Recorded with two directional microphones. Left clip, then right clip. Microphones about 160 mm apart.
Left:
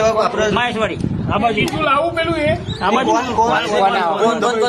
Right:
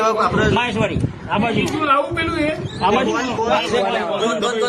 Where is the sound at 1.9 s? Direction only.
70° left (ahead or behind).